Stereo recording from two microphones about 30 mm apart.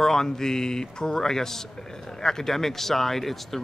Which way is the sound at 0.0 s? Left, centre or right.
Centre.